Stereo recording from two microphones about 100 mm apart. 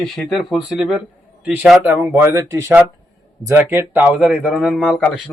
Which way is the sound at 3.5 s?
20° right (ahead or behind).